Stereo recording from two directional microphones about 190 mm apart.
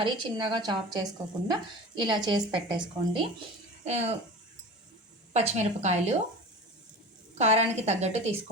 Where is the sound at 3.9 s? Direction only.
35° right (ahead or behind).